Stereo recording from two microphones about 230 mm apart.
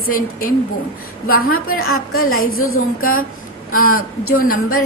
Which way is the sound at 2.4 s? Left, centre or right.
Left.